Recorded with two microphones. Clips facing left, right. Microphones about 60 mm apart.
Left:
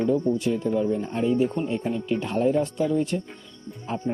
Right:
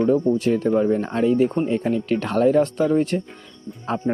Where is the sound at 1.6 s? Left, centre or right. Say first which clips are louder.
Right 5 dB; right.